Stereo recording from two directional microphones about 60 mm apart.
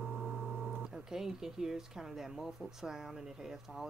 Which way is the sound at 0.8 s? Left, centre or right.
Centre.